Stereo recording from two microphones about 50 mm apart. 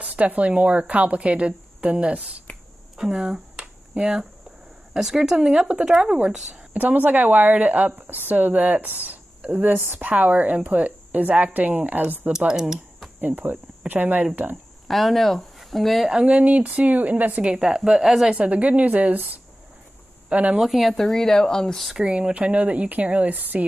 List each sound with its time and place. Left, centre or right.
0.0 s a woman's voice: right
2.5 s a sound: left
3.1 s speech: centre
6.7 s a woman's voice: right
12.3 s speech: centre
13.2 s a woman's voice: right
14.9 s speech: centre
16.1 s speech: centre
16.3 s a woman's voice: right
17.7 s speech: centre
18.3 s a woman's voice: right
20.5 s speech: centre
22.0 s a woman's voice: right